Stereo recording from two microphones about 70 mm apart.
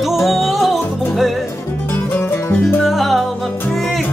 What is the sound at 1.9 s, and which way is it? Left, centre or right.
Music, left.